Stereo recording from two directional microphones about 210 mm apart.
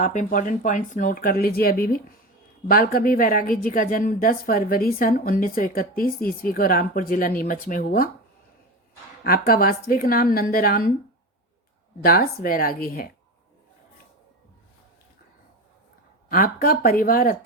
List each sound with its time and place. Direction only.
0.0 s a woman's voice: 40° left (ahead or behind)
9.2 s a woman's voice: 45° left (ahead or behind)
12.0 s a woman's voice: 45° left (ahead or behind)
16.3 s a woman's voice: 45° left (ahead or behind)